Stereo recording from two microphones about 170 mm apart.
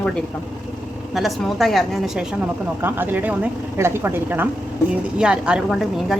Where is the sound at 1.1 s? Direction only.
Centre (ahead or behind).